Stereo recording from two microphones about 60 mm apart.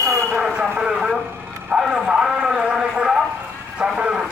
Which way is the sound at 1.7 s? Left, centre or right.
Centre.